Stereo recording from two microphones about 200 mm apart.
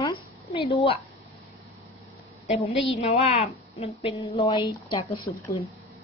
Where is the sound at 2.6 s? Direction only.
30° left (ahead or behind).